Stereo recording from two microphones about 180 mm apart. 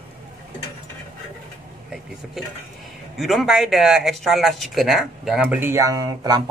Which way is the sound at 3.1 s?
Centre (ahead or behind).